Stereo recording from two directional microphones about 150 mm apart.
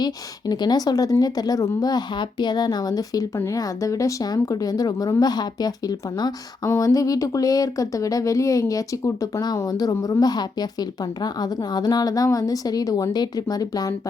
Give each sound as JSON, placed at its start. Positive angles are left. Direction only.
{"t": 0.0, "sound": "speech", "side_deg": 30}